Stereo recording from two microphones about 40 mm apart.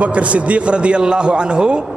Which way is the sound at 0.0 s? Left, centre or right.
Right.